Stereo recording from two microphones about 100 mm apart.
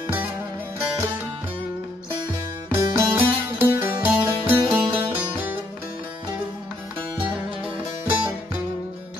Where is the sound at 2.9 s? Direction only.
20° right (ahead or behind).